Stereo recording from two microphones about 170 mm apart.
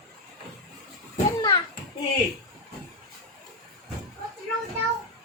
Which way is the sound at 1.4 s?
20° left (ahead or behind).